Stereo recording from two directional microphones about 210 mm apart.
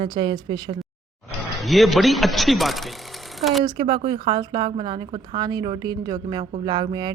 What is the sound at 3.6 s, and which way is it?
A woman's voice, 25° right (ahead or behind).